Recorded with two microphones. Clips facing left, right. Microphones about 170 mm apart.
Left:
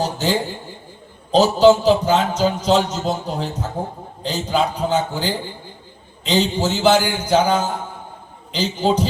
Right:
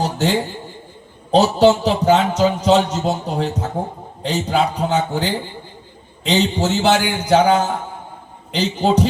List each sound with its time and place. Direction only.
1.3 s a man's voice: 65° right (ahead or behind)